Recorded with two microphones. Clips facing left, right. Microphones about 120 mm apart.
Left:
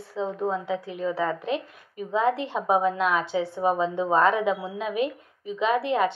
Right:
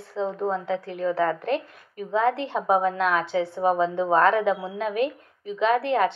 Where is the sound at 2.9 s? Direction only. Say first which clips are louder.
Right 1 dB; 45° right (ahead or behind).